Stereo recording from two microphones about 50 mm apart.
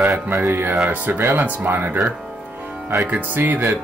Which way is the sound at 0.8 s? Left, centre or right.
Right.